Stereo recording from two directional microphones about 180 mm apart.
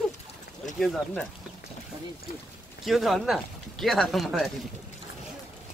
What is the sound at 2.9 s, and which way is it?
Speech, centre (ahead or behind).